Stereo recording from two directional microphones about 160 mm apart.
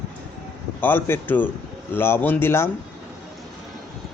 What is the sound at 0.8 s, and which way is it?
Speech, 15° left (ahead or behind).